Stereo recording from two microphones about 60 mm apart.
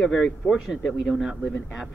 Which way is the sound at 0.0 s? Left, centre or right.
Centre.